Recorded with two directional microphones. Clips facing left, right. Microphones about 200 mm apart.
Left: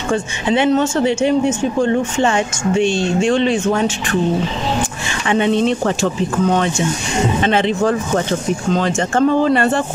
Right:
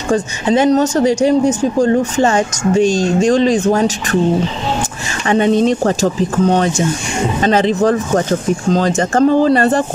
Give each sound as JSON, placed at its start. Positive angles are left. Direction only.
{"t": 0.1, "sound": "speech", "side_deg": -40}
{"t": 5.2, "sound": "speech", "side_deg": -40}